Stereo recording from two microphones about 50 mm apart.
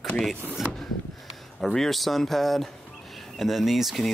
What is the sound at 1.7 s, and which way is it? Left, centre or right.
A man's voice, centre.